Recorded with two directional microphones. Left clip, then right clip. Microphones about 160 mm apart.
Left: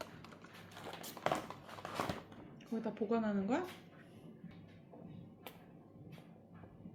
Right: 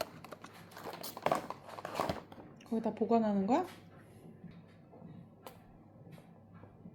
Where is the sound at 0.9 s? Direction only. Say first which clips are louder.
Right 4 dB; 40° right (ahead or behind).